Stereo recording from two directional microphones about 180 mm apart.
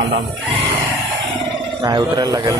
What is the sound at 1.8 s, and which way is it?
Speech, 20° right (ahead or behind).